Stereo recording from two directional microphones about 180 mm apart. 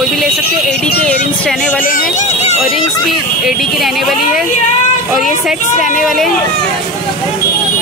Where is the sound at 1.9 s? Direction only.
55° left (ahead or behind).